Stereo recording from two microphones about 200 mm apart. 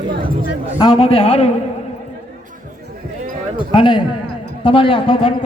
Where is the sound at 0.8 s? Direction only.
25° left (ahead or behind).